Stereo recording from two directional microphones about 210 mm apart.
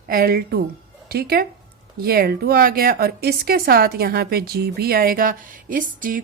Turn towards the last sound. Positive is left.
turn(degrees=-40)  # may be behind; listen again after turning